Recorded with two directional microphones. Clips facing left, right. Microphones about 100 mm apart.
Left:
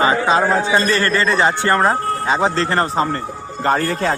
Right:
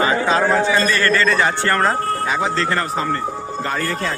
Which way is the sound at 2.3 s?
35° left (ahead or behind).